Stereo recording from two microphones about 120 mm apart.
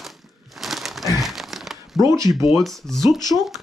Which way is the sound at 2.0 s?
25° right (ahead or behind).